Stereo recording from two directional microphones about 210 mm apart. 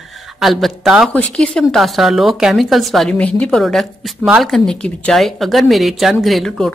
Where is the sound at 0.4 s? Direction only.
Centre (ahead or behind).